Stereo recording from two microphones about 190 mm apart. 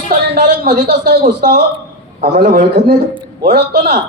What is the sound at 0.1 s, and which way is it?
A man's voice, 45° right (ahead or behind).